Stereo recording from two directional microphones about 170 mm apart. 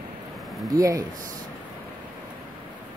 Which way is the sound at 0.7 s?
20° right (ahead or behind).